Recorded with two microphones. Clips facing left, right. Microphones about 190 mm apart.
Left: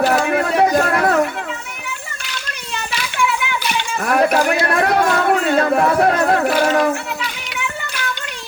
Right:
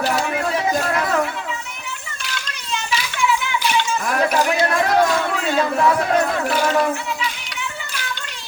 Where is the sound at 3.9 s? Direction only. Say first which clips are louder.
Left 8 dB; 60° left (ahead or behind).